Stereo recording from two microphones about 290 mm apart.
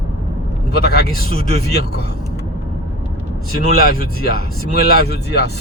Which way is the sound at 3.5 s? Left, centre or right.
Left.